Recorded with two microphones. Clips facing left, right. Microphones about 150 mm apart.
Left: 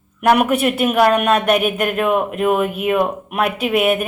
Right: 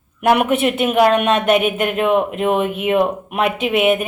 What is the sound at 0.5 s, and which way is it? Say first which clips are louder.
Speech: even; 25° right (ahead or behind).